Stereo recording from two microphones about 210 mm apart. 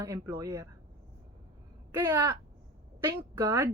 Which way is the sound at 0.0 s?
15° right (ahead or behind).